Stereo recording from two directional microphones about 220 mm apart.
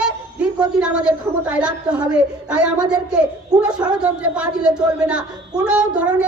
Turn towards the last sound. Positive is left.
turn(degrees=-5)  # may be behind; listen again after turning